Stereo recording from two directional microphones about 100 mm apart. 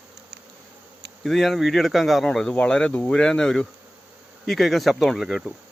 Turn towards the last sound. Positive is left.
turn(degrees=0)  # may be behind; listen again after turning